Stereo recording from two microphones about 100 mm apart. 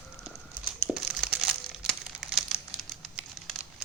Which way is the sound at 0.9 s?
5° right (ahead or behind).